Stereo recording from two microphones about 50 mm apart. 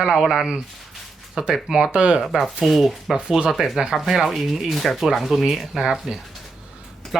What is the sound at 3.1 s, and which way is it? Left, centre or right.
Speech, centre.